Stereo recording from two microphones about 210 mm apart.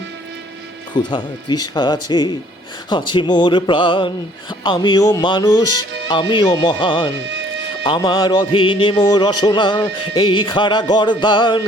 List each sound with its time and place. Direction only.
0.9 s speech: 20° left (ahead or behind)